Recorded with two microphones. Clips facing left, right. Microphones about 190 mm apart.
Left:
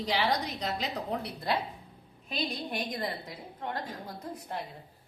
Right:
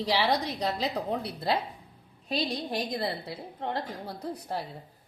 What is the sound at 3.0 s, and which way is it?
Speech, 30° right (ahead or behind).